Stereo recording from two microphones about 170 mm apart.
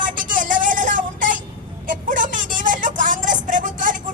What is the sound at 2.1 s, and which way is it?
Vehicle, 50° right (ahead or behind).